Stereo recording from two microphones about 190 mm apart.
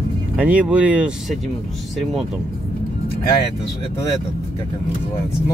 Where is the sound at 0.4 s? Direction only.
5° right (ahead or behind).